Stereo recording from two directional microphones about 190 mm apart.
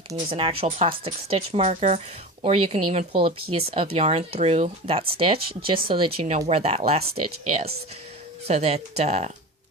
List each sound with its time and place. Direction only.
0.3 s speech: 30° right (ahead or behind)
8.4 s speech: 35° right (ahead or behind)